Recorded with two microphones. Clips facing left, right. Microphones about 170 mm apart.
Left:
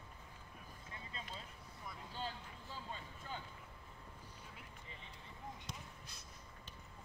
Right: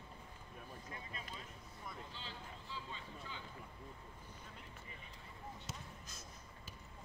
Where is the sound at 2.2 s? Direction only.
45° left (ahead or behind).